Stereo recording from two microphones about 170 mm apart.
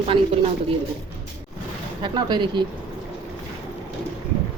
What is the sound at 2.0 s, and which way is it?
Speech, 25° right (ahead or behind).